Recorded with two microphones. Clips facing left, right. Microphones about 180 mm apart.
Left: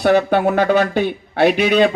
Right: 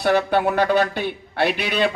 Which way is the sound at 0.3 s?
45° left (ahead or behind).